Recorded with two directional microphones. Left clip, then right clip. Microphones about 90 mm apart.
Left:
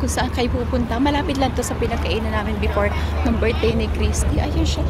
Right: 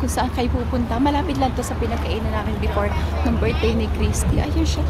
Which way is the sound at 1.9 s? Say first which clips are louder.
Left 2 dB; 15° left (ahead or behind).